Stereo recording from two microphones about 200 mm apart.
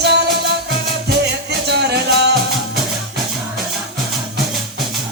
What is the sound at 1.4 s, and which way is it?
Music, 55° right (ahead or behind).